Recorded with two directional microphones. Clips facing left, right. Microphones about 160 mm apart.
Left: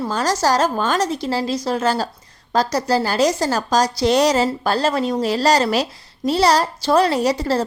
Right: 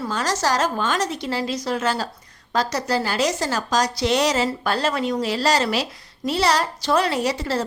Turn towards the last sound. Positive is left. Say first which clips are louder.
# left 4 dB
turn(degrees=35)  # may be behind; listen again after turning